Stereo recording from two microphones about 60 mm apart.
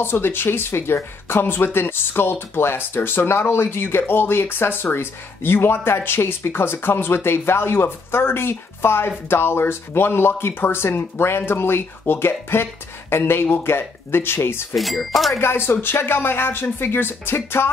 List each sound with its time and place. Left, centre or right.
0.0 s speech: left
14.8 s speech: centre
15.4 s speech: left